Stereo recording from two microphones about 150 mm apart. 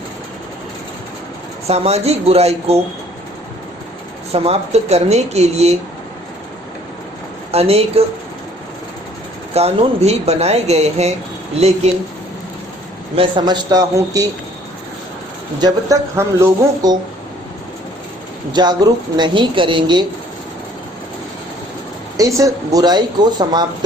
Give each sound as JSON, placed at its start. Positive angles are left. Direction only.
{"t": 1.6, "sound": "speech", "side_deg": -45}
{"t": 4.3, "sound": "speech", "side_deg": -45}
{"t": 7.5, "sound": "speech", "side_deg": -45}
{"t": 9.6, "sound": "speech", "side_deg": -45}
{"t": 13.1, "sound": "a woman's voice", "side_deg": -30}
{"t": 15.6, "sound": "a woman's voice", "side_deg": -20}
{"t": 18.5, "sound": "a woman's voice", "side_deg": -30}
{"t": 22.4, "sound": "a woman's voice", "side_deg": -25}